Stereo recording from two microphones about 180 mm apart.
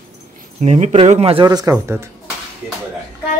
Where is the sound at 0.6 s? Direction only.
40° right (ahead or behind); by 2.0 s 15° right (ahead or behind).